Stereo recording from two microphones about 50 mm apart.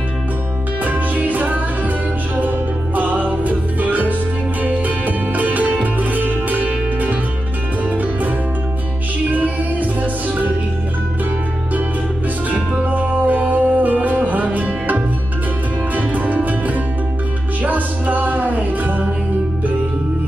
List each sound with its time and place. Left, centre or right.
0.8 s music: right
3.0 s music: right
9.3 s music: right
12.8 s music: right